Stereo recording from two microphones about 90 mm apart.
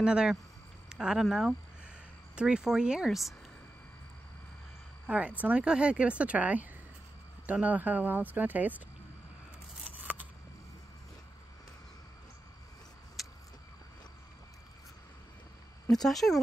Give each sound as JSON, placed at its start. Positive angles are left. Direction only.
{"t": 0.0, "sound": "speech", "side_deg": -10}
{"t": 0.8, "sound": "a sound", "side_deg": -5}
{"t": 2.3, "sound": "speech", "side_deg": -10}
{"t": 5.0, "sound": "speech", "side_deg": -15}
{"t": 15.9, "sound": "speech", "side_deg": 5}